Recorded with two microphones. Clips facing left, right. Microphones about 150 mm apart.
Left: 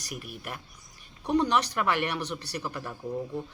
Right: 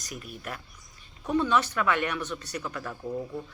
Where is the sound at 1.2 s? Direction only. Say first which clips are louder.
Even; 35° left (ahead or behind).